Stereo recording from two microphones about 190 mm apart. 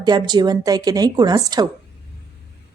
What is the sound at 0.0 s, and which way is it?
A woman's voice, 20° right (ahead or behind).